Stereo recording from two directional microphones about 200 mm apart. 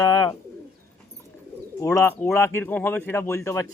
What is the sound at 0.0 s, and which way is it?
Bird, 20° left (ahead or behind).